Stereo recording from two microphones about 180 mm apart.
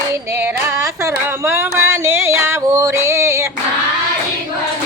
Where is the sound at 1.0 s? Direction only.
15° right (ahead or behind).